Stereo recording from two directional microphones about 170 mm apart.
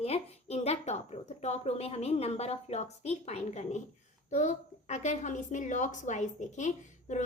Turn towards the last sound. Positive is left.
turn(degrees=45)  # may be behind; listen again after turning